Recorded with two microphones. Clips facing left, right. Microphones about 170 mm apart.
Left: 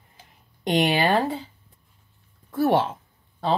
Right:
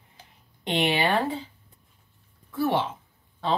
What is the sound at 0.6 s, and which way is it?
Speech, 40° left (ahead or behind).